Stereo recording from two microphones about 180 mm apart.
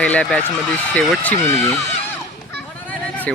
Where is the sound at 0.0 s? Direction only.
5° left (ahead or behind).